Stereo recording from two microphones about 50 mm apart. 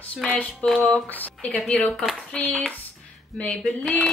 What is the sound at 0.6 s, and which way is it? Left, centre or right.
Speech, centre.